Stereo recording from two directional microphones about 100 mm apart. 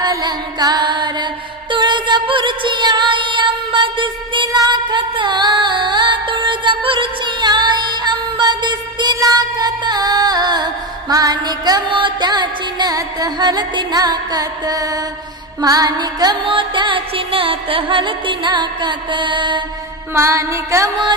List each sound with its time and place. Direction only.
0.0 s music: 45° right (ahead or behind)
4.5 s music: 45° right (ahead or behind)
20.1 s music: 30° right (ahead or behind)